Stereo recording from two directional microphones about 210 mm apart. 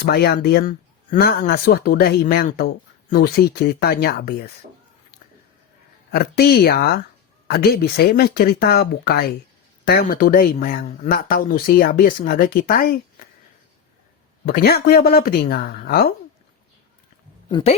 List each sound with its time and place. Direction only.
0.0 s speech: 50° left (ahead or behind)
6.1 s speech: 45° left (ahead or behind)
14.4 s speech: 45° left (ahead or behind)
17.5 s speech: 30° left (ahead or behind)